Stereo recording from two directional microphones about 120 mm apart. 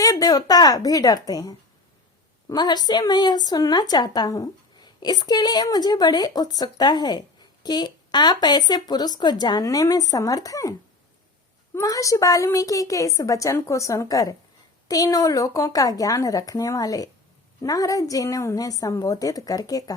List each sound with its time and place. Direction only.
0.0 s a woman's voice: 30° left (ahead or behind)